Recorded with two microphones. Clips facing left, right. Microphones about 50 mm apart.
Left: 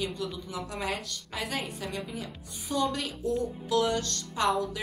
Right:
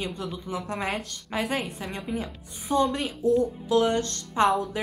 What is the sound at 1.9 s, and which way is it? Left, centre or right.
Speech, right.